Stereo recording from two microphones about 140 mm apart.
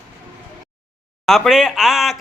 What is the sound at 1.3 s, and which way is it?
Speech, centre (ahead or behind).